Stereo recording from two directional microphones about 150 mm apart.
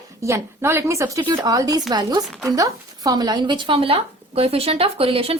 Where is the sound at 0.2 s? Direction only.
20° right (ahead or behind).